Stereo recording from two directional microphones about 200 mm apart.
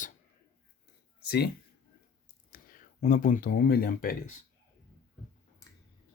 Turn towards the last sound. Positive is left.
turn(degrees=45)  # may be behind; listen again after turning